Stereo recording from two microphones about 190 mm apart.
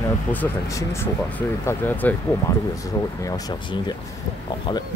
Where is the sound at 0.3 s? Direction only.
15° left (ahead or behind).